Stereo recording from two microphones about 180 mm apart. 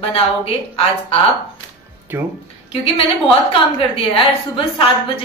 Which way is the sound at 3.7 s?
30° left (ahead or behind).